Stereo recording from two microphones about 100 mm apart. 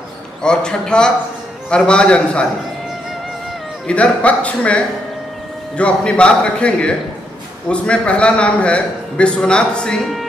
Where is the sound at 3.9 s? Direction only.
10° left (ahead or behind).